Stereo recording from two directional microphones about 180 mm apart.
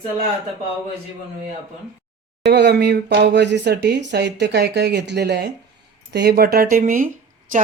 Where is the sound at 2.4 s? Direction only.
70° right (ahead or behind).